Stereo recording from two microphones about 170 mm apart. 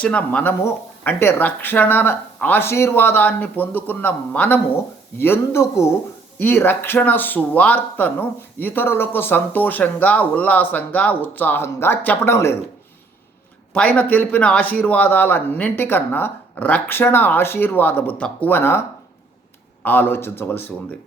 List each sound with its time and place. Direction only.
0.0 s speech: 5° left (ahead or behind)
13.7 s speech: 10° left (ahead or behind)
19.8 s speech: 10° left (ahead or behind)